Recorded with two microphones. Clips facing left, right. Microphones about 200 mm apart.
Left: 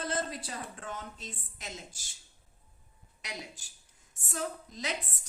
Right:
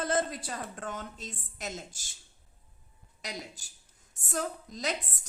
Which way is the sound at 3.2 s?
40° right (ahead or behind).